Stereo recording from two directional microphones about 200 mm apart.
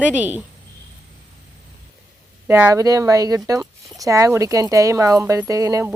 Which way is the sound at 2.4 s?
10° right (ahead or behind).